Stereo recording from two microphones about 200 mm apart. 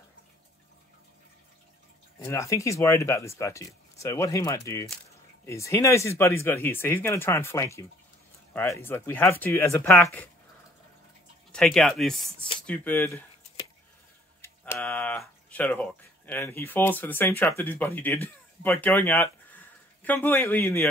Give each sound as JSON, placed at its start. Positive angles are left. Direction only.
{"t": 2.1, "sound": "speech", "side_deg": 15}
{"t": 11.5, "sound": "speech", "side_deg": 0}
{"t": 14.4, "sound": "speech", "side_deg": 10}